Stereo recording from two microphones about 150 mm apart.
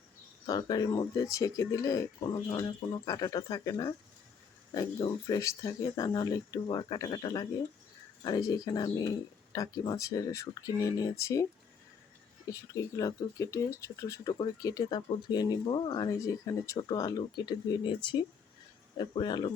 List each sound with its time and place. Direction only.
0.4 s speech: 25° left (ahead or behind)
12.5 s speech: 20° left (ahead or behind)